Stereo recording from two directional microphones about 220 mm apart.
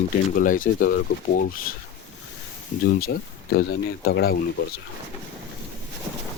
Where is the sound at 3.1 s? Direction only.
45° left (ahead or behind).